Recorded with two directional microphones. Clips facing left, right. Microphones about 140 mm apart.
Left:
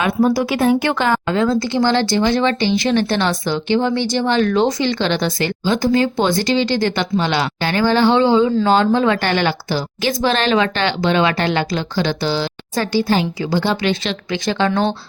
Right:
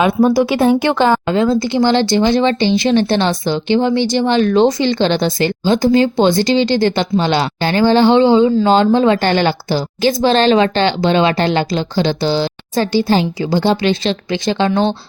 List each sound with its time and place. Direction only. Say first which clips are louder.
0.0 s speech: right 4 dB; 20° right (ahead or behind)
1.5 s speech: right 3 dB; 10° right (ahead or behind)